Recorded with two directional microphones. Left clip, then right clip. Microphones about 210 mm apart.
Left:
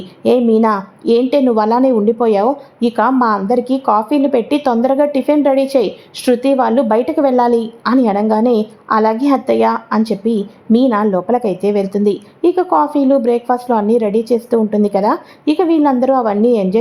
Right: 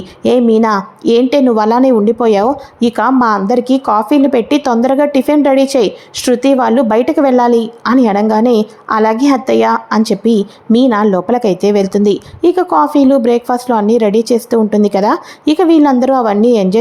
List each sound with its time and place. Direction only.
0.2 s a woman's voice: 20° right (ahead or behind)